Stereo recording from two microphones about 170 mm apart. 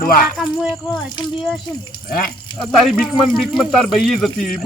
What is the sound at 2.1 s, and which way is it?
Speech, 60° left (ahead or behind).